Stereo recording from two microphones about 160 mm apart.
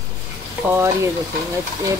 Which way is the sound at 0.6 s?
15° right (ahead or behind).